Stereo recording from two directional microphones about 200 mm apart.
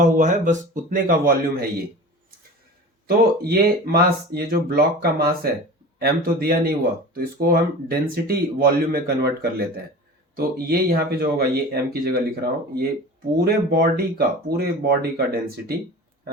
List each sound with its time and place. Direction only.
0.0 s speech: 35° right (ahead or behind)
3.1 s speech: 50° right (ahead or behind)